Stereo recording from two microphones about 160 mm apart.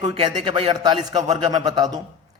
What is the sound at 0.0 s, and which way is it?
A man's voice, 30° right (ahead or behind).